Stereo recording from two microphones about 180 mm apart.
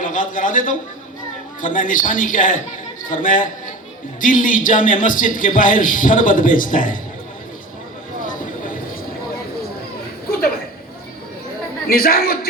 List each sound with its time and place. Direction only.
0.0 s a man's voice: 45° left (ahead or behind)
8.2 s a sound: 45° left (ahead or behind)
11.9 s a man's voice: 55° left (ahead or behind)